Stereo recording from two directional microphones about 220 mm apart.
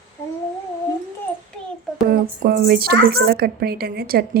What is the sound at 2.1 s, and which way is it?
A woman's voice, 45° right (ahead or behind).